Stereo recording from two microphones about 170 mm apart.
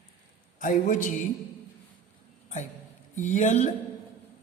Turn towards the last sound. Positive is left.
turn(degrees=45)  # may be behind; listen again after turning